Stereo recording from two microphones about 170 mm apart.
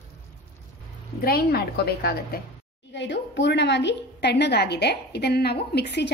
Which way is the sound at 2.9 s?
90° left.